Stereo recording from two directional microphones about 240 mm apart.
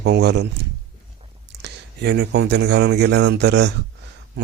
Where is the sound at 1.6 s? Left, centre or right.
Right.